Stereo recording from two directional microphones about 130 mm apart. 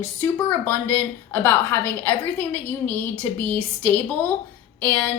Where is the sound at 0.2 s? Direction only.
15° left (ahead or behind).